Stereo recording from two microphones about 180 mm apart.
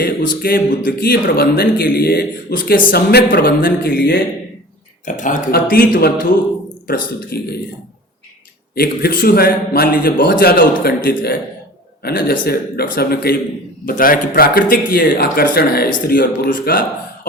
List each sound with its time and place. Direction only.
0.0 s speech: 55° left (ahead or behind)
5.0 s a man's voice: 45° left (ahead or behind)
5.5 s a man's voice: 55° left (ahead or behind)
8.7 s a man's voice: 60° left (ahead or behind)